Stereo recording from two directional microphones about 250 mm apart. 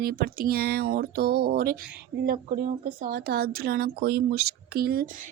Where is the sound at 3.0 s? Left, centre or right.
Right.